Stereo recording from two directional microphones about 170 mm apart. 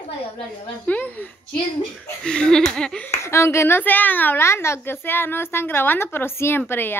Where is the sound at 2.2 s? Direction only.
5° left (ahead or behind).